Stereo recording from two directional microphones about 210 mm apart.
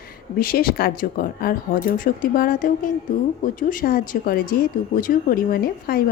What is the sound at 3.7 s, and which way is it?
Speech, 40° left (ahead or behind).